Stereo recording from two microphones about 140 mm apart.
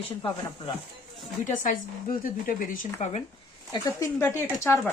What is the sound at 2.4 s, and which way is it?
Speech, 80° left.